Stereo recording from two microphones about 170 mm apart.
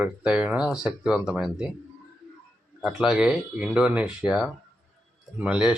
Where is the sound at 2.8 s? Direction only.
5° right (ahead or behind).